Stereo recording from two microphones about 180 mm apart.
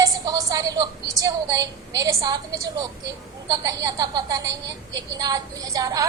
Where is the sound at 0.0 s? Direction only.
20° right (ahead or behind).